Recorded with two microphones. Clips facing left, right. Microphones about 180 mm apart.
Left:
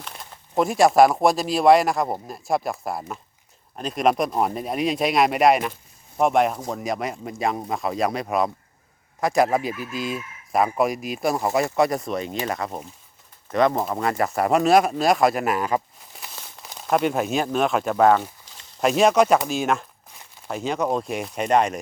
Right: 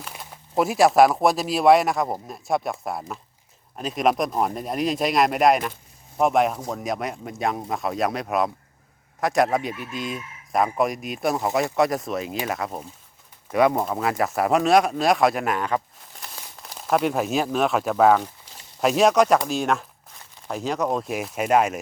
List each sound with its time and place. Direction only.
0.0 s speech: 5° right (ahead or behind)